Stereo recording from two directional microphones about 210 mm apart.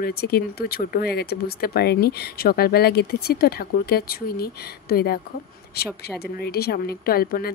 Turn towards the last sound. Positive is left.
turn(degrees=45)  # may be behind; listen again after turning